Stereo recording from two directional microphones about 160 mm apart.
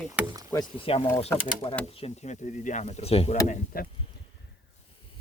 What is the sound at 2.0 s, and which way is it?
Speech, 50° left (ahead or behind).